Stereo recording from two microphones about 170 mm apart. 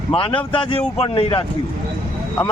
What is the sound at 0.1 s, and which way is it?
Speech, 30° left (ahead or behind).